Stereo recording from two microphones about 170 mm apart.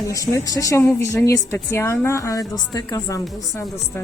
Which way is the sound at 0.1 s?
20° left (ahead or behind).